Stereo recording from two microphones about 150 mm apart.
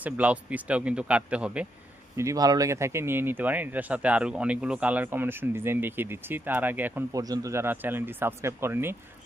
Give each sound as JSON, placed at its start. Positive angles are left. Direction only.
{"t": 0.0, "sound": "speech", "side_deg": -10}
{"t": 2.1, "sound": "speech", "side_deg": -20}
{"t": 7.2, "sound": "speech", "side_deg": -25}